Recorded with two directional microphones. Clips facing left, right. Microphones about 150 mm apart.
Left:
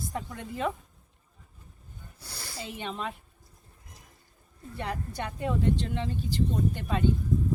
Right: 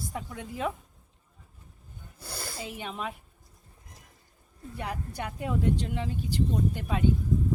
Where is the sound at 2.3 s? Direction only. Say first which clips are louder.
Right 3 dB; 50° right (ahead or behind).